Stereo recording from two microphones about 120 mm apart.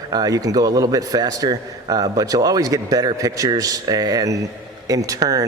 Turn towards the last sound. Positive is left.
turn(degrees=-30)  # may be behind; listen again after turning